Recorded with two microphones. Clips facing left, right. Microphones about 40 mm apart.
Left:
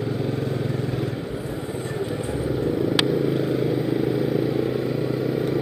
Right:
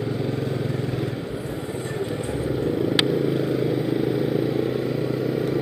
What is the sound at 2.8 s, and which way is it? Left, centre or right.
Vehicle, right.